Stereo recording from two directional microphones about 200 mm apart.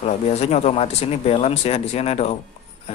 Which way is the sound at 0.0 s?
35° left (ahead or behind).